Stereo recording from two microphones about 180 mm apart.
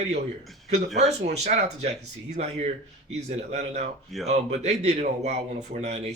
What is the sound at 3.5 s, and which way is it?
A man's voice, 40° right (ahead or behind).